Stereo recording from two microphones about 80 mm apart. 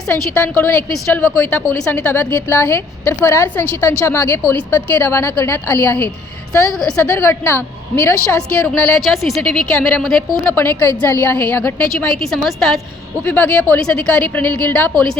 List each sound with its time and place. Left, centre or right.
0.1 s a woman's voice: left
7.1 s a woman's voice: left
8.4 s a woman's voice: centre
9.0 s a woman's voice: centre
9.4 s a woman's voice: centre
10.4 s a woman's voice: left
12.1 s a woman's voice: centre
13.2 s a woman's voice: centre